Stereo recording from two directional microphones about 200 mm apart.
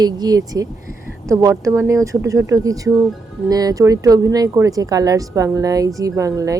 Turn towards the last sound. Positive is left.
turn(degrees=-15)  # may be behind; listen again after turning